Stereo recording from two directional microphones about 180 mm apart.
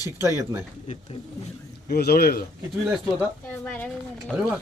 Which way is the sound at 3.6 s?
5° left (ahead or behind).